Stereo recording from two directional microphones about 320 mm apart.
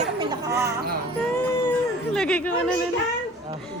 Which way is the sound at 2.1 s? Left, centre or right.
Centre.